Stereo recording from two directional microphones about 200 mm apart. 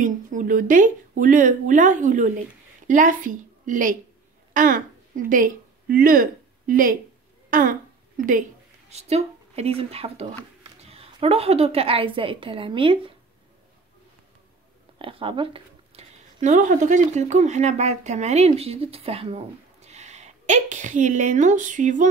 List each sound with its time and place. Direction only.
0.0 s a woman's voice: 40° right (ahead or behind)
8.9 s a woman's voice: 30° right (ahead or behind)
15.0 s speech: 25° right (ahead or behind)